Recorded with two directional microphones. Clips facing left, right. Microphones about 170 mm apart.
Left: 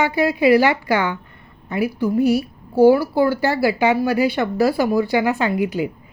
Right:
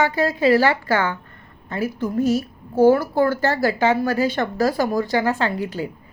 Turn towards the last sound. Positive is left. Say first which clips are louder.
# left 4 dB
turn(degrees=15)  # may be behind; listen again after turning